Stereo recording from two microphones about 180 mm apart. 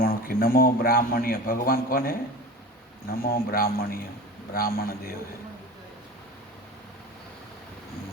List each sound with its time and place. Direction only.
0.0 s a man's voice: 55° left (ahead or behind)